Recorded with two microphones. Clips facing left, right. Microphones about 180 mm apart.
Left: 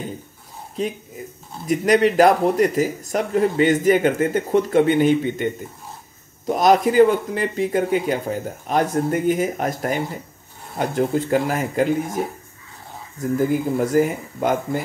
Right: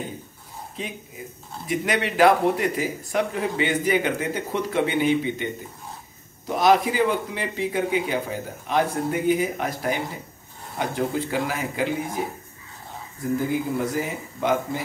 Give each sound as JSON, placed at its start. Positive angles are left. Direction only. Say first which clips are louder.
{"t": 1.7, "sound": "a man's voice", "louder": "left 8 dB", "side_deg": 40}
{"t": 13.4, "sound": "a man's voice", "louder": "left 7 dB", "side_deg": 50}